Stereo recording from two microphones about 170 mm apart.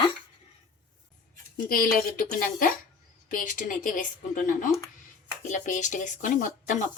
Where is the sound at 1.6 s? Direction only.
60° left (ahead or behind).